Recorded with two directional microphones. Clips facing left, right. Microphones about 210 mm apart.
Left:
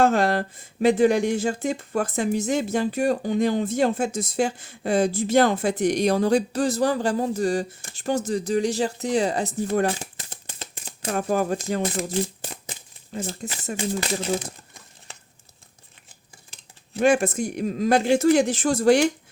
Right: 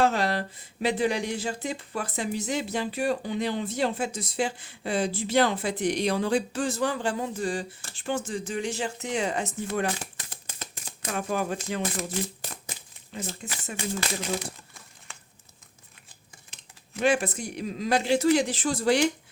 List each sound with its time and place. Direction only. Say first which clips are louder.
0.0 s speech: left 5 dB; 50° left (ahead or behind)
10.0 s shuffling cards: left 2 dB; 25° left (ahead or behind)
11.1 s speech: left 6 dB; 40° left (ahead or behind)
13.1 s speech: left 5 dB; 35° left (ahead or behind)
17.0 s speech: left 5 dB; 45° left (ahead or behind)